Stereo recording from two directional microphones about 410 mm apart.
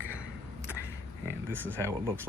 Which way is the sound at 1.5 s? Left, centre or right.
Centre.